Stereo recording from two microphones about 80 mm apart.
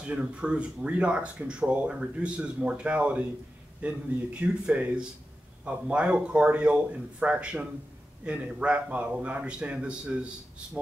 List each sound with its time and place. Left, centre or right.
0.0 s speech: centre